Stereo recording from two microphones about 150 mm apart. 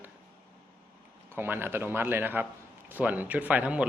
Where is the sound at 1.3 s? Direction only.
15° right (ahead or behind).